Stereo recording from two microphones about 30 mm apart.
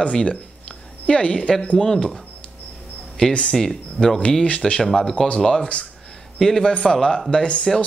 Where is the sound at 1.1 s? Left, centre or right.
Left.